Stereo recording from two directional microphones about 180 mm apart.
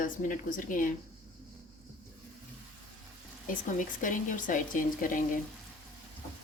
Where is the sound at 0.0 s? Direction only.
50° left (ahead or behind).